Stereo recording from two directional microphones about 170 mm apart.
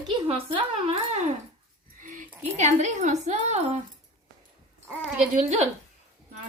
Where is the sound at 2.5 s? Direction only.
40° right (ahead or behind).